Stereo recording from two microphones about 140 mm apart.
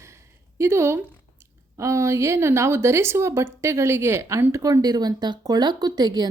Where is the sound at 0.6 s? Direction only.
20° right (ahead or behind).